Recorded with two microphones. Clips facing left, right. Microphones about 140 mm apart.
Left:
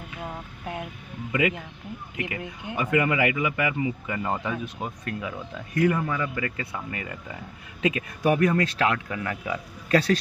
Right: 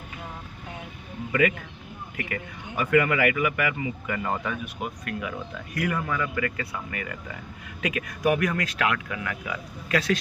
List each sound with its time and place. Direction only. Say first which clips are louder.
1.4 s speech: right 1 dB; 20° left (ahead or behind)